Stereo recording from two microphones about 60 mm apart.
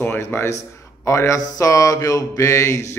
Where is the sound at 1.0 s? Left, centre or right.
Left.